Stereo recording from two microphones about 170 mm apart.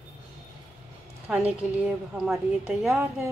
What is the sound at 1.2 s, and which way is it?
A woman's voice, 5° right (ahead or behind).